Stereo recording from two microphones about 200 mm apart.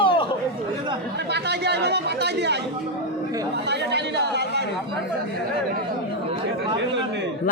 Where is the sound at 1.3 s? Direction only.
55° right (ahead or behind).